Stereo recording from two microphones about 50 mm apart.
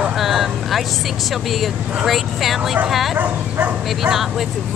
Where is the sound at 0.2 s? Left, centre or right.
Centre.